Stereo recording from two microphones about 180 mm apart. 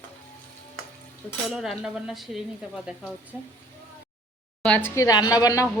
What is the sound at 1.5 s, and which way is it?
Speech, 5° right (ahead or behind).